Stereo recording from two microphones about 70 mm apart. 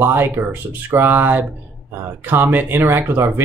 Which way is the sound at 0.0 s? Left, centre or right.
Right.